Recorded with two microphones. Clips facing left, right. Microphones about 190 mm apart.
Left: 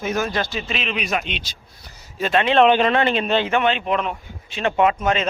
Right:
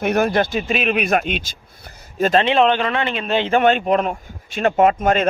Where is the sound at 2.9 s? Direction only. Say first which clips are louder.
Left 3 dB; 35° left (ahead or behind).